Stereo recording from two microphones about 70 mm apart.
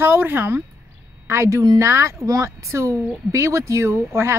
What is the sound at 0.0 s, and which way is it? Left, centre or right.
Speech, right.